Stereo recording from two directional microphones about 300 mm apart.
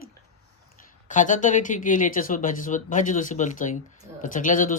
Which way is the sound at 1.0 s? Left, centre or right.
Left.